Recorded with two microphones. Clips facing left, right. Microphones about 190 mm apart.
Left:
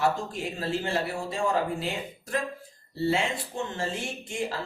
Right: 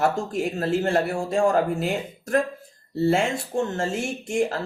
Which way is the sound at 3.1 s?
50° right (ahead or behind).